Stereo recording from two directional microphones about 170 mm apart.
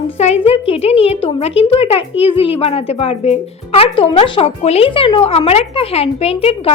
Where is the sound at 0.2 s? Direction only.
40° left (ahead or behind).